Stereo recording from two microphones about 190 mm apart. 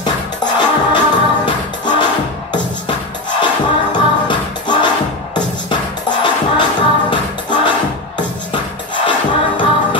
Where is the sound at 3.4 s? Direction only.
25° left (ahead or behind).